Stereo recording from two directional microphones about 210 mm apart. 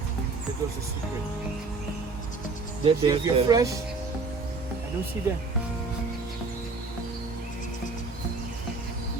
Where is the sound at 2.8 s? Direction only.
20° right (ahead or behind).